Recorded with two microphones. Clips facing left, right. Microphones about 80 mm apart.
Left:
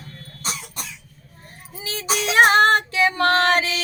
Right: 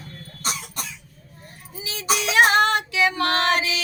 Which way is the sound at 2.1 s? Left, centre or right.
Left.